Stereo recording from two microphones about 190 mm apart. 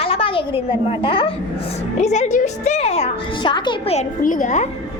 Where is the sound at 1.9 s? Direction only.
35° left (ahead or behind).